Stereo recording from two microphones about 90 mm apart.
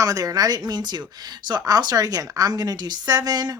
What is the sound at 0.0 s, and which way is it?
A woman's voice, 40° right (ahead or behind).